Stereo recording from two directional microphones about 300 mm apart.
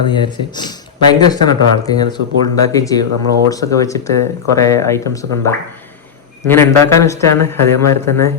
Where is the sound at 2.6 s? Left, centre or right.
Centre.